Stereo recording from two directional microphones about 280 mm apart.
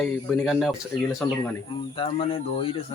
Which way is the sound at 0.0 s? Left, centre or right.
Centre.